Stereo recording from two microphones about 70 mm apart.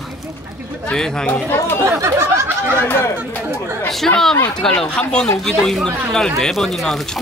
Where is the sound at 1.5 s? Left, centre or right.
Left.